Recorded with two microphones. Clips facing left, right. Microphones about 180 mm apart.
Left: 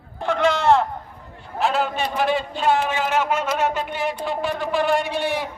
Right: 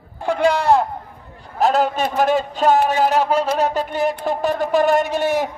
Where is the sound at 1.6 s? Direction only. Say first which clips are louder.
Right 5 dB; 40° right (ahead or behind).